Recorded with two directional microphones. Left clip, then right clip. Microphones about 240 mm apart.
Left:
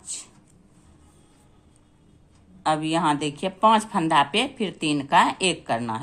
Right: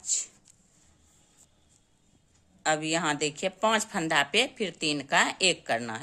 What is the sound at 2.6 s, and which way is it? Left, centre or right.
Speech, right.